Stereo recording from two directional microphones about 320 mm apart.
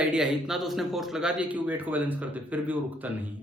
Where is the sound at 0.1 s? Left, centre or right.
Centre.